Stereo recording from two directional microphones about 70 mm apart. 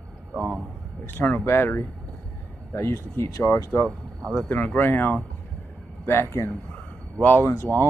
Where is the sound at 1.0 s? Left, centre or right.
Left.